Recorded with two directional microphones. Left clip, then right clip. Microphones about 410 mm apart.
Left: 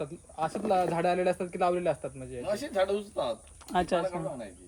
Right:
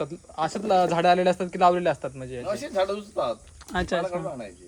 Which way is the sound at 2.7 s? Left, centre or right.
Centre.